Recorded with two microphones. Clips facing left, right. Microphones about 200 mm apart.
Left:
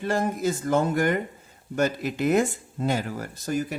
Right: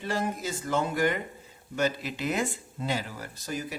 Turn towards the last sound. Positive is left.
turn(degrees=50)  # may be behind; listen again after turning